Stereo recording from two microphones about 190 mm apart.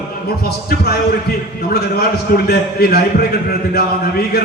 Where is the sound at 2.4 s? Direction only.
55° left (ahead or behind).